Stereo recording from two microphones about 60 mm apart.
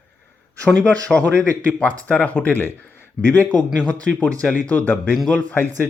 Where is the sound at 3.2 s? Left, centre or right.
Centre.